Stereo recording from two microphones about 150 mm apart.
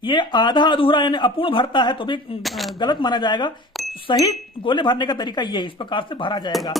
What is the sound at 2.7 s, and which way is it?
Speech, 30° left (ahead or behind).